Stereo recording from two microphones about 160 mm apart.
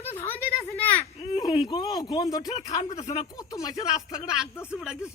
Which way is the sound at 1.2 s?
30° left (ahead or behind).